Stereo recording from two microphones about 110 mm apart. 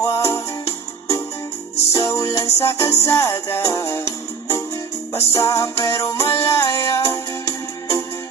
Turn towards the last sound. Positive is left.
turn(degrees=25)  # may be behind; listen again after turning